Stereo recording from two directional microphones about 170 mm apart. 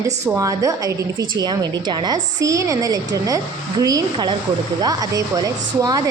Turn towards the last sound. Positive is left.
turn(degrees=-20)  # may be behind; listen again after turning